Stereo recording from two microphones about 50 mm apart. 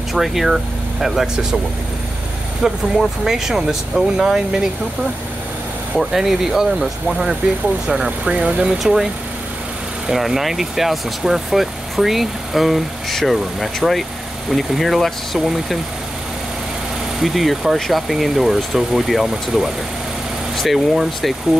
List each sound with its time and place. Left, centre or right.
0.1 s speech: centre
2.6 s speech: centre
5.9 s speech: centre
8.3 s speech: right
8.8 s speech: centre
17.2 s speech: centre